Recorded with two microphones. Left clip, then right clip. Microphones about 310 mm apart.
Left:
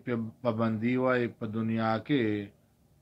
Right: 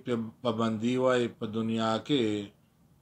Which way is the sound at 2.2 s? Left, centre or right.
Right.